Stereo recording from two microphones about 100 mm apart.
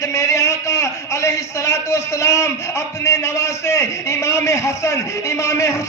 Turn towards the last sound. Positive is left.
turn(degrees=30)  # may be behind; listen again after turning